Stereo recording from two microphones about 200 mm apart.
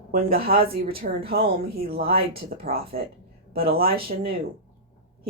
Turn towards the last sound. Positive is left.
turn(degrees=-50)  # may be behind; listen again after turning